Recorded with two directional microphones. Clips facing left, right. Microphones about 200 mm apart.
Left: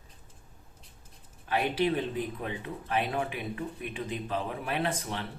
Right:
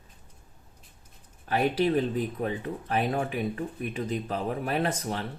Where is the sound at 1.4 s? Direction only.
35° right (ahead or behind).